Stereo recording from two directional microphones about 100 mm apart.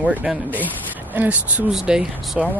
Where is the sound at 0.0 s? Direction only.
15° right (ahead or behind).